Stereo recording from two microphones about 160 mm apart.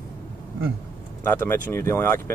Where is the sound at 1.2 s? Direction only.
15° left (ahead or behind).